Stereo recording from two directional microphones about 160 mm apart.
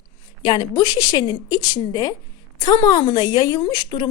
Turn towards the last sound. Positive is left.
turn(degrees=30)  # may be behind; listen again after turning